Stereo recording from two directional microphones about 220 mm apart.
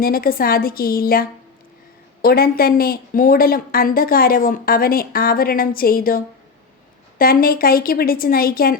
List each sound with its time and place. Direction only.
0.0 s a woman's voice: 40° left (ahead or behind)